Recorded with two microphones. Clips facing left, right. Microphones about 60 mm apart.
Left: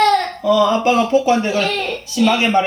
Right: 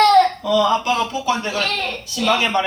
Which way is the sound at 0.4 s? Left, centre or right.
Left.